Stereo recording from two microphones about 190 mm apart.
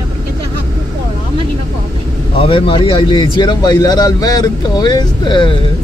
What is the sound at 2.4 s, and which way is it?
A man's voice, 25° left (ahead or behind).